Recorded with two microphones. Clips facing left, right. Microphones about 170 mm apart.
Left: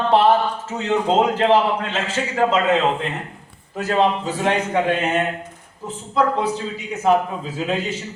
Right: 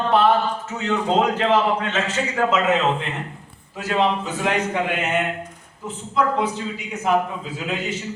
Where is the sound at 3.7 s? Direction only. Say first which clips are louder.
Left 2 dB; 40° left (ahead or behind).